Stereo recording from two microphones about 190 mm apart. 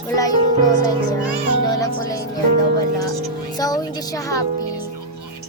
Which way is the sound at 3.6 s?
20° left (ahead or behind).